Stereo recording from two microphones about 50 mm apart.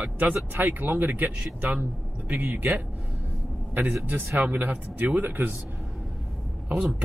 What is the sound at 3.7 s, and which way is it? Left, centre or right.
Speech, right.